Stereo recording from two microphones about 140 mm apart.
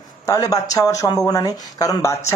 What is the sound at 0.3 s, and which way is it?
Speech, 25° left (ahead or behind).